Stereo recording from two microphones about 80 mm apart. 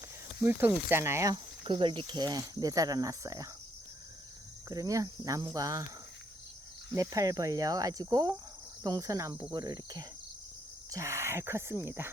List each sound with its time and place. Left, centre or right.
0.4 s speech: right
1.6 s speech: right
4.7 s speech: right
6.9 s speech: right
9.5 s speech: right
10.9 s speech: right